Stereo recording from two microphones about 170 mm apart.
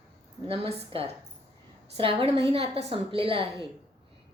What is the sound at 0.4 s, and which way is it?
A woman's voice, 35° right (ahead or behind).